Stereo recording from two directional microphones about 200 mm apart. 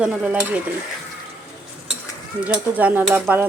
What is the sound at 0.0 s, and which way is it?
Stir, 5° right (ahead or behind).